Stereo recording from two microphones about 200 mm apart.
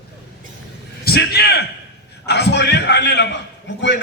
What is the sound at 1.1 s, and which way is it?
A man's voice, 50° left (ahead or behind).